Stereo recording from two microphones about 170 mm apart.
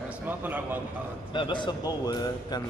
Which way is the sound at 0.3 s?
10° right (ahead or behind).